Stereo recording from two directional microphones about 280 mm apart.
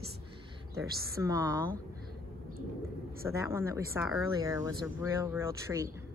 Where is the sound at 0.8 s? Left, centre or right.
Centre.